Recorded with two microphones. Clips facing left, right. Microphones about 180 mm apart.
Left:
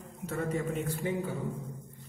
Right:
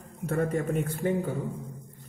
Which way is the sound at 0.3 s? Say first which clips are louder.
Right 5 dB; 55° right (ahead or behind).